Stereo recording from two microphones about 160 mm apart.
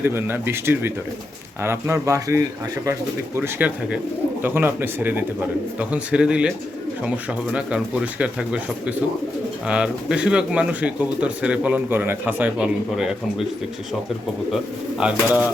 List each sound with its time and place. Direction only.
0.0 s speech: 15° right (ahead or behind)
14.5 s speech: 5° right (ahead or behind)